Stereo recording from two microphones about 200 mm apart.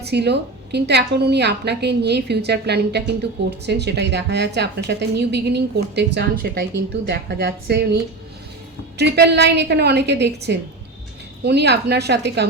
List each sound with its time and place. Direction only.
0.0 s a woman's voice: 55° right (ahead or behind)